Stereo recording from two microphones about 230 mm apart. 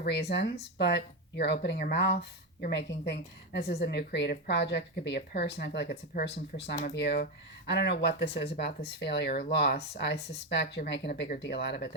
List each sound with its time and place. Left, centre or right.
0.0 s a woman's voice: left